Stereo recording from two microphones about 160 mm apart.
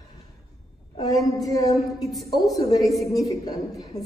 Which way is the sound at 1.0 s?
20° left (ahead or behind).